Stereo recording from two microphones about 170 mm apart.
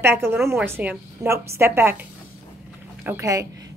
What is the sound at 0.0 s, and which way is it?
A woman's voice, 15° right (ahead or behind).